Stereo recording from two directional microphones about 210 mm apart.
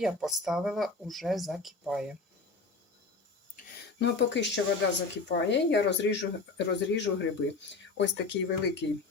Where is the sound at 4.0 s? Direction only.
55° left (ahead or behind).